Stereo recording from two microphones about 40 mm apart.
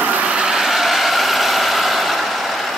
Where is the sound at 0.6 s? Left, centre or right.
Centre.